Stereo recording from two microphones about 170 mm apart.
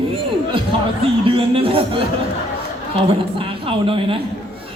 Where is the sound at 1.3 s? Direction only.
30° right (ahead or behind).